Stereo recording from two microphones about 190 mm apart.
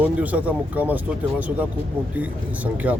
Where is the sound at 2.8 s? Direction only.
10° right (ahead or behind).